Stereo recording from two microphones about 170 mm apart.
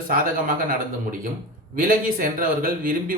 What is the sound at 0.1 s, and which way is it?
Speech, 55° right (ahead or behind).